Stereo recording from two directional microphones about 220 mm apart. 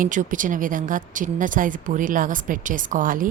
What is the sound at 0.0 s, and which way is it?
A woman's voice, 35° right (ahead or behind).